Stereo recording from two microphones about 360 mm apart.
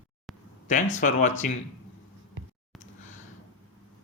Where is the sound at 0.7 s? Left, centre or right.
Left.